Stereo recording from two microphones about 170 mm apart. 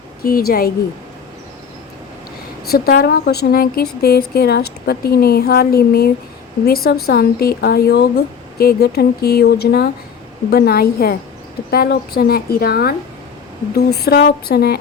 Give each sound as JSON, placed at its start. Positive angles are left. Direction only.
{"t": 0.2, "sound": "speech", "side_deg": 60}
{"t": 2.6, "sound": "speech", "side_deg": 60}